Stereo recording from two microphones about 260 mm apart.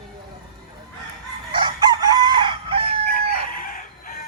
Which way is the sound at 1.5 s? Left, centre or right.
Centre.